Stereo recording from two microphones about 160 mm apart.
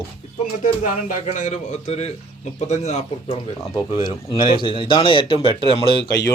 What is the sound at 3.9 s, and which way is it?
A man's voice, 30° left (ahead or behind).